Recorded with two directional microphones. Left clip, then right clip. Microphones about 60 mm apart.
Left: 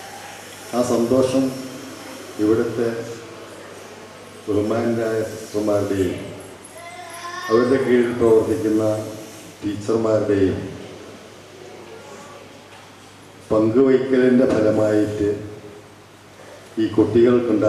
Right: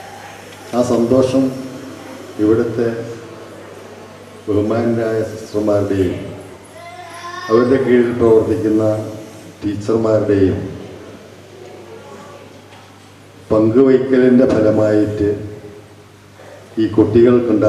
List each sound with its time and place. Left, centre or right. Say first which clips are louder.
0.7 s a man's voice: right 4 dB; centre
4.4 s a man's voice: right 4 dB; right
13.5 s a man's voice: right 4 dB; right
16.7 s a man's voice: right 4 dB; right